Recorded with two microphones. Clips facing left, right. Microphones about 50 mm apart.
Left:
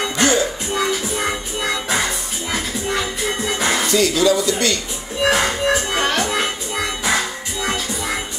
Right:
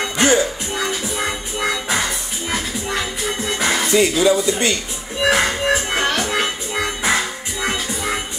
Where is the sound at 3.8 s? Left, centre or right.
Right.